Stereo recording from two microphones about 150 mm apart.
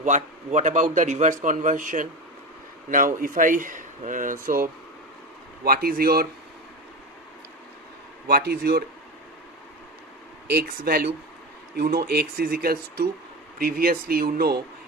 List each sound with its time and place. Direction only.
0.0 s a man's voice: 55° right (ahead or behind)
5.6 s speech: 85° right
8.3 s speech: 90° right
10.4 s speech: 90° right